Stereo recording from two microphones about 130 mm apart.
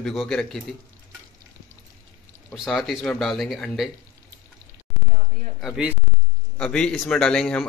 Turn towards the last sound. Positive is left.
turn(degrees=5)  # may be behind; listen again after turning